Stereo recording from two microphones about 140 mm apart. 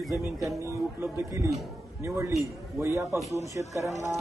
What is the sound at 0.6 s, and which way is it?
Speech, 15° right (ahead or behind).